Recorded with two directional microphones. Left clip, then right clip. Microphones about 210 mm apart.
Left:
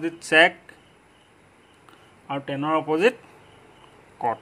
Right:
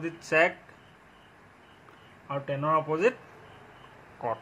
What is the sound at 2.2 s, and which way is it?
Speech, 55° left (ahead or behind).